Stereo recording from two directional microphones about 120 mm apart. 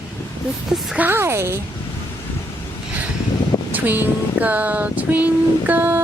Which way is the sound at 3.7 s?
15° right (ahead or behind).